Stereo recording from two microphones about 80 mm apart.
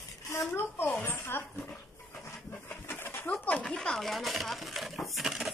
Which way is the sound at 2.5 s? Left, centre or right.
Left.